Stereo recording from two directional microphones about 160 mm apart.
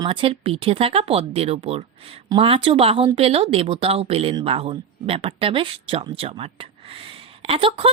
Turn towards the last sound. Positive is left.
turn(degrees=-35)  # may be behind; listen again after turning